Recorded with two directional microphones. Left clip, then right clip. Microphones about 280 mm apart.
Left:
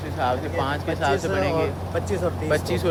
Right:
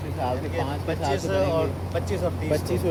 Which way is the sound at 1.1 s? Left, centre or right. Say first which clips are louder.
Right 2 dB; left.